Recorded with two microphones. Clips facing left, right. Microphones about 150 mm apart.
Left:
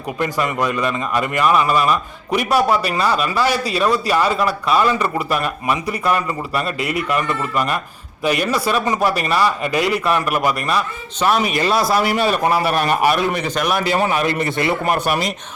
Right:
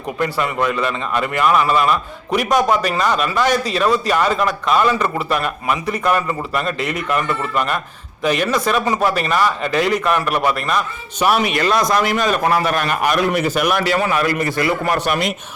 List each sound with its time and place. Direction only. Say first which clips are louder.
0.2 s speech: even; 15° left (ahead or behind)
11.2 s speech: right 1 dB; 10° right (ahead or behind)
11.6 s speech: even; 5° left (ahead or behind)
13.3 s speech: right 2 dB; 5° right (ahead or behind)
13.9 s a man's voice: even; 25° left (ahead or behind)